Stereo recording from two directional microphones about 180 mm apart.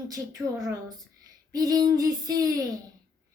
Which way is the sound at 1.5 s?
20° right (ahead or behind).